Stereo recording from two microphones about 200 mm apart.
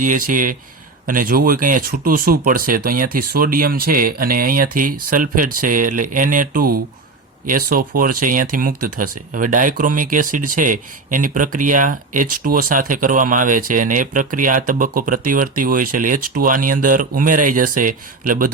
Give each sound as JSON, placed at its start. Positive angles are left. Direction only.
{"t": 0.0, "sound": "speech", "side_deg": -40}